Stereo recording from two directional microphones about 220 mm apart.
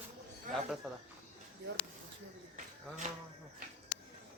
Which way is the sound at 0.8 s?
5° right (ahead or behind).